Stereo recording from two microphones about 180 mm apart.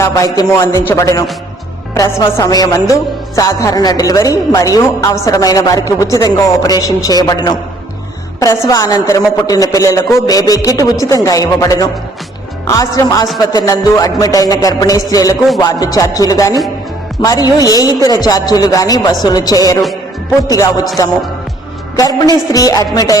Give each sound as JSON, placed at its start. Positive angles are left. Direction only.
{"t": 0.0, "sound": "a man's voice", "side_deg": 20}
{"t": 21.9, "sound": "speech", "side_deg": 20}